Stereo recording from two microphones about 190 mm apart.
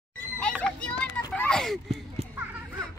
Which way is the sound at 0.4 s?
5° left (ahead or behind).